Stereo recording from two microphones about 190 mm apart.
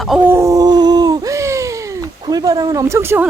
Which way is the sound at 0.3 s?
15° right (ahead or behind).